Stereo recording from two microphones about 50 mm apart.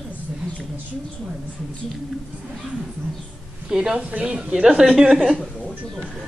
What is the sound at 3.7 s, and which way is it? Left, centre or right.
Speech, centre.